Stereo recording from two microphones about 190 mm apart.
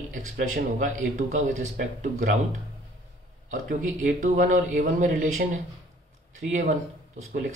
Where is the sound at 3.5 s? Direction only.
45° right (ahead or behind).